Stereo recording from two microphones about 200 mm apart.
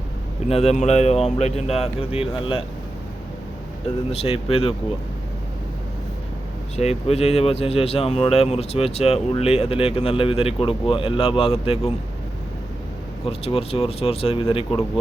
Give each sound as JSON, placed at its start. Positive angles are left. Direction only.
{"t": 0.4, "sound": "speech", "side_deg": 30}
{"t": 4.1, "sound": "speech", "side_deg": 30}
{"t": 6.7, "sound": "speech", "side_deg": 30}
{"t": 13.2, "sound": "speech", "side_deg": 30}